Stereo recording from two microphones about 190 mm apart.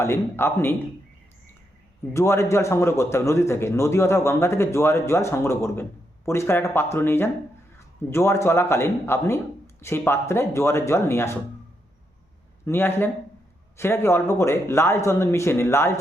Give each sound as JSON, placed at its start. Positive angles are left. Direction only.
{"t": 0.0, "sound": "a man's voice", "side_deg": 15}
{"t": 2.1, "sound": "a man's voice", "side_deg": 15}
{"t": 12.6, "sound": "a man's voice", "side_deg": 10}